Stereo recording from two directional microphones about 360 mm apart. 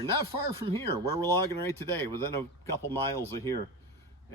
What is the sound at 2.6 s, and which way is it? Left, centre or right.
Speech, centre.